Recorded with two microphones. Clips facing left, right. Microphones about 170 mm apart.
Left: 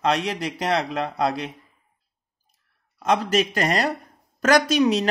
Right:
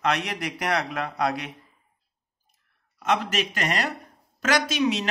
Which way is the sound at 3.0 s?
35° left (ahead or behind).